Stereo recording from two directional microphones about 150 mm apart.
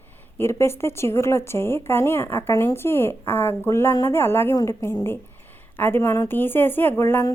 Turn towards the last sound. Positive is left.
turn(degrees=15)  # may be behind; listen again after turning